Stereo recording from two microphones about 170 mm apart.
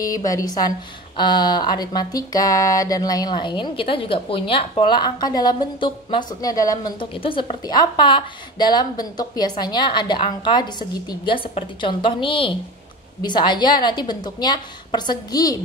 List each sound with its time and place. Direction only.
0.0 s a woman's voice: 20° left (ahead or behind)